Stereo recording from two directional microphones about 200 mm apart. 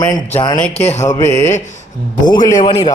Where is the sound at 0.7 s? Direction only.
35° left (ahead or behind).